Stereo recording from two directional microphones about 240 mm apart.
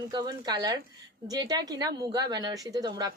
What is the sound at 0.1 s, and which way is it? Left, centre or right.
A woman's voice, centre.